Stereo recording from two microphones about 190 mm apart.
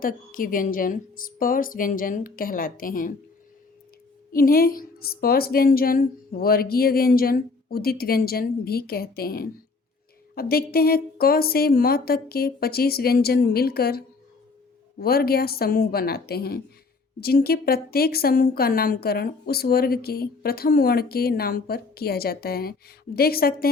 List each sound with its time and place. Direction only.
0.0 s a woman's voice: 45° left (ahead or behind)
4.3 s a woman's voice: 50° left (ahead or behind)